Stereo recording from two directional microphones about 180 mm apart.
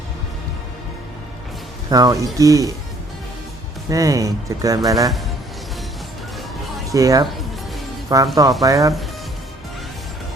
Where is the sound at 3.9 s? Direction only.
20° right (ahead or behind).